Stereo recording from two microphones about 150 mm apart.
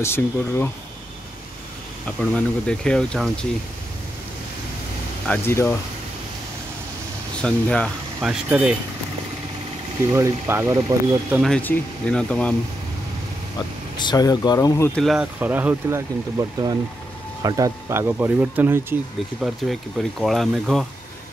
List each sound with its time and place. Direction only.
0.0 s speech: 15° left (ahead or behind)
2.0 s speech: 10° left (ahead or behind)
5.2 s speech: 15° left (ahead or behind)
7.4 s speech: 5° left (ahead or behind)
10.1 s speech: 20° right (ahead or behind)
11.3 s speech: centre (ahead or behind)
13.9 s speech: 25° left (ahead or behind)
14.9 s speech: centre (ahead or behind)
15.3 s speech: 10° right (ahead or behind)
17.4 s speech: 25° right (ahead or behind)
19.4 s speech: centre (ahead or behind)